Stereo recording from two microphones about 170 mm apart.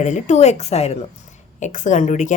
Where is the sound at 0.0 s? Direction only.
45° left (ahead or behind).